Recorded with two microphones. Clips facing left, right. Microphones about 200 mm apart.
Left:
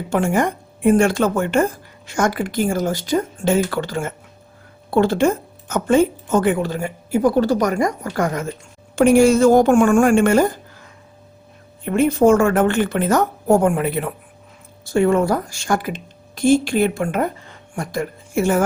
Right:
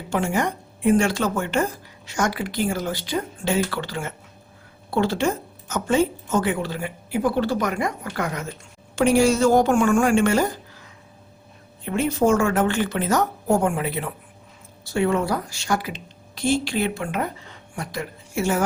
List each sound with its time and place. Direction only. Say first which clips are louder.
0.1 s a woman's voice: left 4 dB; 50° left (ahead or behind)
11.9 s a woman's voice: left 6 dB; 55° left (ahead or behind)